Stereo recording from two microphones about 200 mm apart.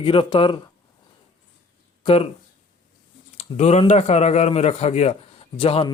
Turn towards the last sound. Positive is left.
turn(degrees=25)  # may be behind; listen again after turning